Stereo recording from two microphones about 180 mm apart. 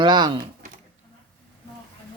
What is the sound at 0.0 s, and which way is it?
Speech, 25° right (ahead or behind).